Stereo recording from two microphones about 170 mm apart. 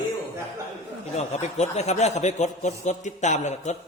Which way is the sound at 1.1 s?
40° left (ahead or behind).